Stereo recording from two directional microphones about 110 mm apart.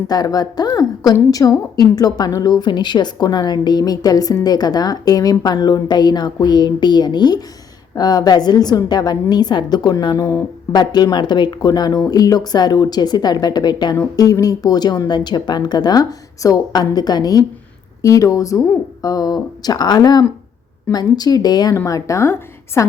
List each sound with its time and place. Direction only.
0.1 s a woman's voice: 35° left (ahead or behind)
13.9 s a woman's voice: 30° left (ahead or behind)